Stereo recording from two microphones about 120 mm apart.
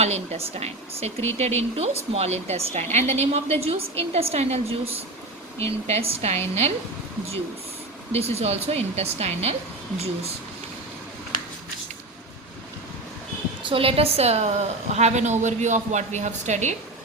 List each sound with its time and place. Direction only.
0.0 s speech: 60° right (ahead or behind)
8.1 s speech: 60° right (ahead or behind)
13.7 s speech: 50° right (ahead or behind)
14.9 s speech: 75° right (ahead or behind)